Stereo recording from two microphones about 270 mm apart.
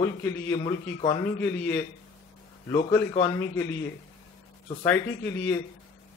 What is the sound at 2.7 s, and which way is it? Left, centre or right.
Speech, centre.